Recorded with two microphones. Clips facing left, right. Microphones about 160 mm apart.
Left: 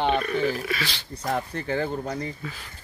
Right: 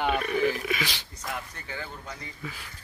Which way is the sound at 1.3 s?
45° left (ahead or behind).